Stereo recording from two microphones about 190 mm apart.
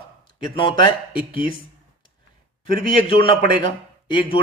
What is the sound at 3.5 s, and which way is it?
Speech, 25° left (ahead or behind).